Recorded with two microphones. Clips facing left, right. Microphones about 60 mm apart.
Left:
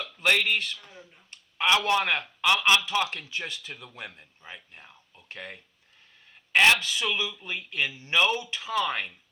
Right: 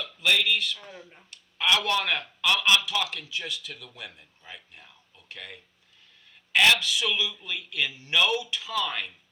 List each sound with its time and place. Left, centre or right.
0.0 s a man's voice: left
0.8 s speech: right
1.3 s a man's voice: left